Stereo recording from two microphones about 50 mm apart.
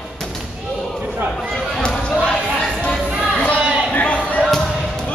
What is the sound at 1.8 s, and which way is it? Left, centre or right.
Basketball bounce, centre.